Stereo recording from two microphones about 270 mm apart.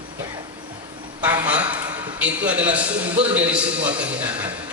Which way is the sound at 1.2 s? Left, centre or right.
Centre.